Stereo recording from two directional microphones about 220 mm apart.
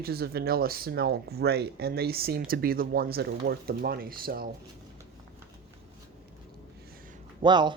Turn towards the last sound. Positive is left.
turn(degrees=-20)  # may be behind; listen again after turning